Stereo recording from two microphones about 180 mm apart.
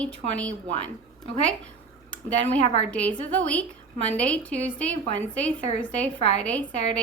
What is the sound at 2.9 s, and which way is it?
Speech, 5° left (ahead or behind).